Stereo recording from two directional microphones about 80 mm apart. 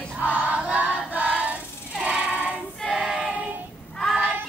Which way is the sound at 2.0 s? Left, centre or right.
Centre.